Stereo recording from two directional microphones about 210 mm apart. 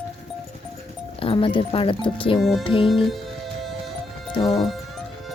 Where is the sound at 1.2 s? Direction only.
25° left (ahead or behind).